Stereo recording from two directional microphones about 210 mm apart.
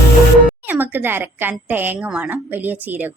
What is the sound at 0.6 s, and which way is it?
A woman's voice, 10° right (ahead or behind).